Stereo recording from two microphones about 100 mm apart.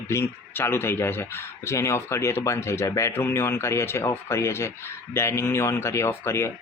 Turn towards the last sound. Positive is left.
turn(degrees=30)  # may be behind; listen again after turning